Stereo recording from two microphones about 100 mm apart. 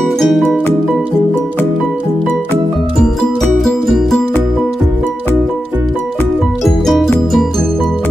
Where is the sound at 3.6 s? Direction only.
Centre (ahead or behind).